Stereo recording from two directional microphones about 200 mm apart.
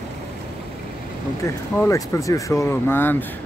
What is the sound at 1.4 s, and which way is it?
Speech, 15° left (ahead or behind).